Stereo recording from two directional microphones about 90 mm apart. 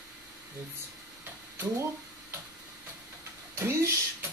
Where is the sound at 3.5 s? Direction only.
30° right (ahead or behind).